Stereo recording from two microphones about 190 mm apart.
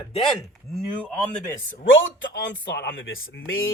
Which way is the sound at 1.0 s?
5° left (ahead or behind).